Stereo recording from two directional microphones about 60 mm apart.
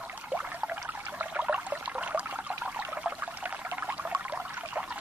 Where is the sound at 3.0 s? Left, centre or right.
Right.